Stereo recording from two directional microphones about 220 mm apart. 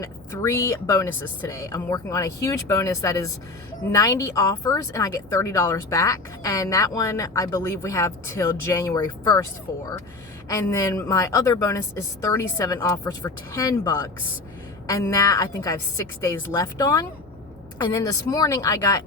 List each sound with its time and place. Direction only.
0.0 s speech: 15° left (ahead or behind)
10.5 s speech: 15° left (ahead or behind)